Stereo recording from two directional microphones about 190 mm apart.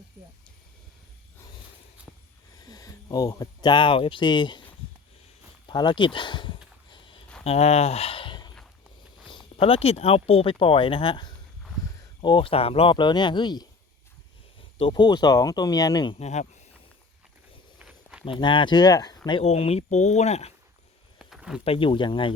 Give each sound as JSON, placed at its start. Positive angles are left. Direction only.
{"t": 2.6, "sound": "speech", "side_deg": 20}
{"t": 5.6, "sound": "speech", "side_deg": 25}
{"t": 6.9, "sound": "a sound", "side_deg": 25}
{"t": 7.4, "sound": "speech", "side_deg": 35}
{"t": 9.6, "sound": "speech", "side_deg": 30}
{"t": 14.8, "sound": "speech", "side_deg": 25}
{"t": 16.1, "sound": "speech", "side_deg": 35}
{"t": 17.7, "sound": "walk", "side_deg": -5}
{"t": 18.3, "sound": "speech", "side_deg": 25}
{"t": 19.4, "sound": "speech", "side_deg": 30}
{"t": 21.2, "sound": "a sound", "side_deg": 0}
{"t": 21.6, "sound": "speech", "side_deg": 30}